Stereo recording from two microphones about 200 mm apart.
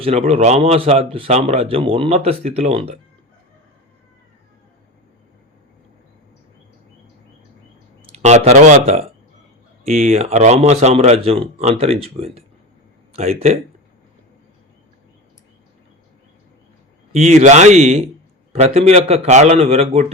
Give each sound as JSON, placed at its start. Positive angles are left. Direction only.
{"t": 0.0, "sound": "speech", "side_deg": -30}
{"t": 8.1, "sound": "speech", "side_deg": -35}
{"t": 17.1, "sound": "speech", "side_deg": -30}